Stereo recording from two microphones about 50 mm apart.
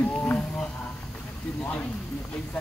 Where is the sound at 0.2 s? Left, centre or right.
Left.